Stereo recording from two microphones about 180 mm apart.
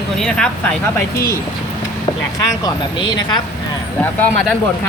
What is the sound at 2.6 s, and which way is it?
Speech, 25° left (ahead or behind).